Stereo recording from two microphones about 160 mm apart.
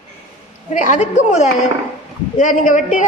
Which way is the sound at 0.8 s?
50° left (ahead or behind).